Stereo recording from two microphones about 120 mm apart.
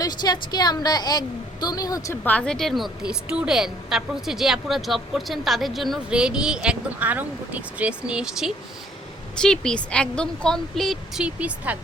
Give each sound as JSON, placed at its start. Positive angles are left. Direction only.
{"t": 0.0, "sound": "a woman's voice", "side_deg": 35}
{"t": 2.2, "sound": "a woman's voice", "side_deg": 10}
{"t": 9.4, "sound": "a woman's voice", "side_deg": 5}
{"t": 11.2, "sound": "speech", "side_deg": -10}